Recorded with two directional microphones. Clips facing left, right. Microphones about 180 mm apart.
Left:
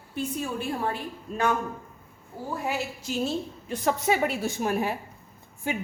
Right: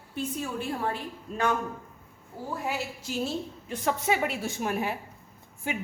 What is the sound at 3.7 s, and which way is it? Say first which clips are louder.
A woman's voice: left 2 dB; 40° left (ahead or behind).